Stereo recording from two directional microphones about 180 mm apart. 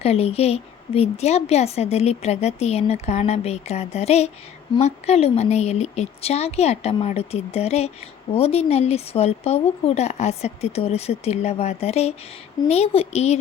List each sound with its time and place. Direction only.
0.0 s a woman's voice: 35° left (ahead or behind)